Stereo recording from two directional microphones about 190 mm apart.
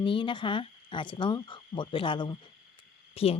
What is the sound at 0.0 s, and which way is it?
Speech, 25° left (ahead or behind).